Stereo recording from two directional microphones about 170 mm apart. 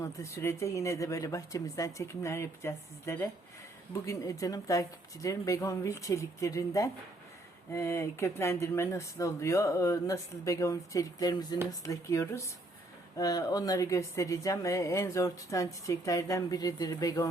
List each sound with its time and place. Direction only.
0.0 s speech: 15° left (ahead or behind)